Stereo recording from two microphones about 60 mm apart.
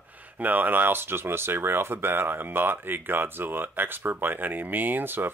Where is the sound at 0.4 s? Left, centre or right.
Right.